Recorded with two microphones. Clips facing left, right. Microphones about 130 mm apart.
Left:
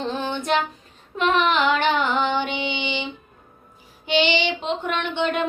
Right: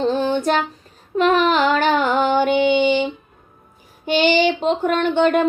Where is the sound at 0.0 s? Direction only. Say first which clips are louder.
Right 8 dB; 35° right (ahead or behind).